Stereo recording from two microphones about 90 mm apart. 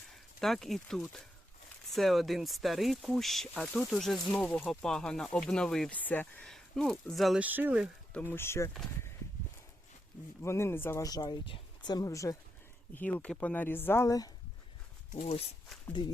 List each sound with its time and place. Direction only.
0.1 s speech: 5° left (ahead or behind)
4.3 s speech: 15° left (ahead or behind)
5.9 s speech: 20° left (ahead or behind)
6.4 s speech: 5° left (ahead or behind)
7.3 s speech: 20° right (ahead or behind)
8.1 s speech: 25° left (ahead or behind)
10.4 s speech: 30° left (ahead or behind)
11.0 s speech: 50° left (ahead or behind)
11.4 s speech: 65° left (ahead or behind); by 12.4 s 40° left (ahead or behind)
12.9 s speech: 20° left (ahead or behind)
15.9 s speech: 60° left (ahead or behind)